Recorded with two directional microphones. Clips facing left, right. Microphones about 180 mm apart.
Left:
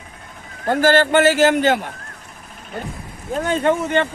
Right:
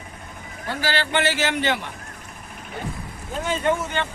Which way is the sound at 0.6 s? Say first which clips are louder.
Left 11 dB; 50° left (ahead or behind).